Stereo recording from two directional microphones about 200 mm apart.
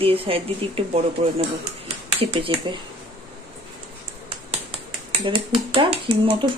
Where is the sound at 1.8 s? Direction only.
25° right (ahead or behind).